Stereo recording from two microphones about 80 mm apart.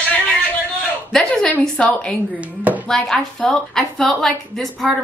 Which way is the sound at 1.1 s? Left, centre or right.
Centre.